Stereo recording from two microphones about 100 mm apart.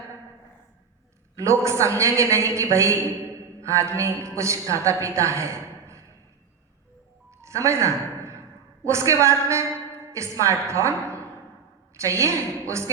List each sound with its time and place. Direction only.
1.4 s a woman's voice: 30° right (ahead or behind)
7.3 s music: 30° right (ahead or behind)
8.8 s a woman's voice: 30° right (ahead or behind)